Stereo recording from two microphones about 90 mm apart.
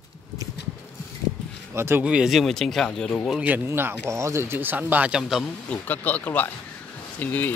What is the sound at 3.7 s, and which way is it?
Speech, 30° right (ahead or behind).